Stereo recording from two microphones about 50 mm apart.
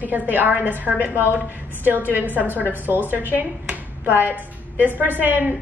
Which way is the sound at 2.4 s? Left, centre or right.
Right.